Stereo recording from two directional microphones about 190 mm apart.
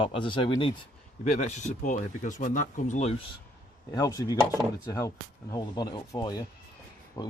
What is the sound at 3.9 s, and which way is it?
Speech, 20° left (ahead or behind).